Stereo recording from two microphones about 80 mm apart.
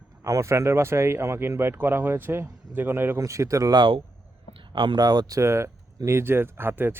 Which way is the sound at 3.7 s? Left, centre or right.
Right.